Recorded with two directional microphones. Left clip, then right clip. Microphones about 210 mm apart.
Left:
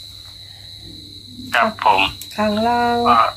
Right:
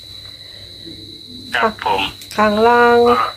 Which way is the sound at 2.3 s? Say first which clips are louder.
Right 7 dB; 30° right (ahead or behind).